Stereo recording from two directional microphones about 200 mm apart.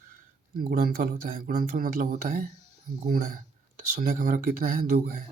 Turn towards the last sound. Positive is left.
turn(degrees=-50)  # may be behind; listen again after turning